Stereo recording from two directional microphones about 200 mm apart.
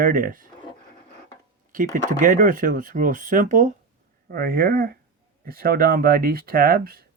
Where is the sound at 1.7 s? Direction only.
40° right (ahead or behind).